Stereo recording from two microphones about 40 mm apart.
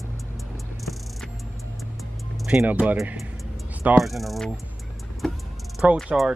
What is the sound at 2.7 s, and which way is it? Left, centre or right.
Speech, right.